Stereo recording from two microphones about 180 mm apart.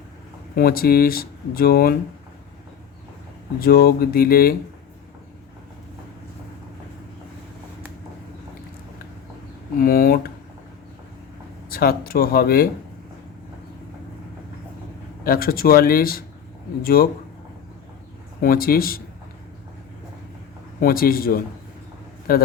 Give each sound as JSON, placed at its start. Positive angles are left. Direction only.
{"t": 0.5, "sound": "speech", "side_deg": 55}
{"t": 3.6, "sound": "speech", "side_deg": 60}
{"t": 9.7, "sound": "speech", "side_deg": 55}
{"t": 11.7, "sound": "speech", "side_deg": 55}
{"t": 15.2, "sound": "speech", "side_deg": 55}
{"t": 18.3, "sound": "speech", "side_deg": 55}
{"t": 20.8, "sound": "speech", "side_deg": 55}